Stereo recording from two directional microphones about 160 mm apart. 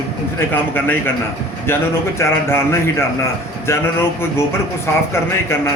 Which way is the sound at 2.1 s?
15° left (ahead or behind).